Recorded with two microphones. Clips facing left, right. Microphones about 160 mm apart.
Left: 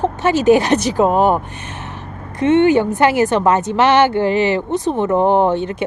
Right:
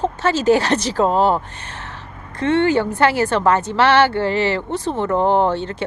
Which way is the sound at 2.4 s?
20° left (ahead or behind).